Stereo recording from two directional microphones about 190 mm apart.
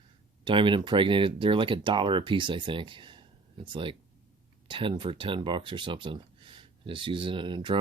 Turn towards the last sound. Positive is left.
turn(degrees=-25)  # may be behind; listen again after turning